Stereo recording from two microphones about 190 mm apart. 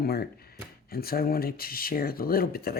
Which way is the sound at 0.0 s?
55° left (ahead or behind).